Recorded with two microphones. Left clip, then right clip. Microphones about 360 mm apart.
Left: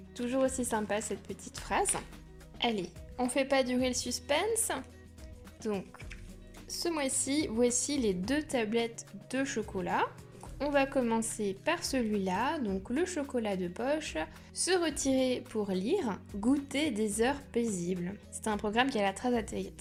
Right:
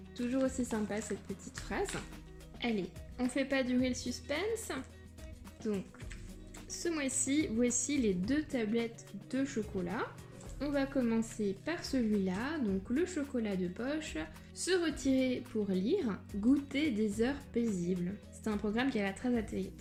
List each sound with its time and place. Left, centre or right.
0.3 s a woman's voice: centre
6.7 s a woman's voice: centre